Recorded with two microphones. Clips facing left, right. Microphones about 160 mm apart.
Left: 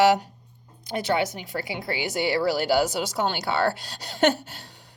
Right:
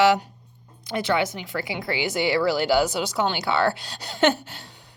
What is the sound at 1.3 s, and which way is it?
Speech, 35° left (ahead or behind).